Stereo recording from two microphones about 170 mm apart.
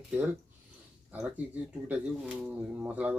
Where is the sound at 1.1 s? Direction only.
10° right (ahead or behind).